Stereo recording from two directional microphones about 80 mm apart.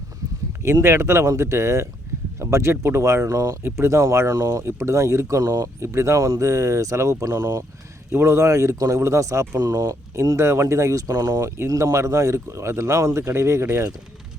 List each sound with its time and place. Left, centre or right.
0.6 s speech: right
3.6 s speech: right
8.1 s speech: right
9.6 s speech: right
10.2 s speech: right